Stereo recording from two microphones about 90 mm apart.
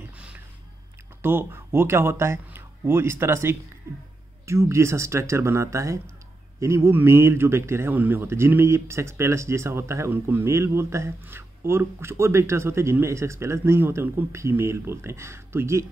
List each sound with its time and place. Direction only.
1.2 s a man's voice: 25° right (ahead or behind)